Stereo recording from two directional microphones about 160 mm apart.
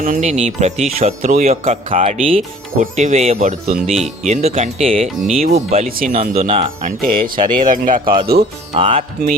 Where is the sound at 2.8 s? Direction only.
45° right (ahead or behind).